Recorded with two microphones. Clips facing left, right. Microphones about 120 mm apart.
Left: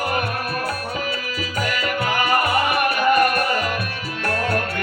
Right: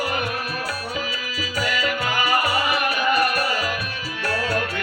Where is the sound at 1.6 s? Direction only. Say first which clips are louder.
Left 1 dB; 50° left (ahead or behind).